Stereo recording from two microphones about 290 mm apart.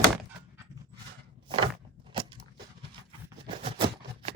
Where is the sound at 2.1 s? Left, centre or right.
Centre.